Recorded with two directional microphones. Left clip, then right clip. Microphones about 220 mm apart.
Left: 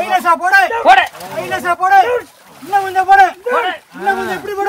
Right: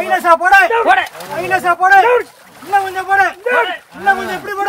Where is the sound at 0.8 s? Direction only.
40° left (ahead or behind).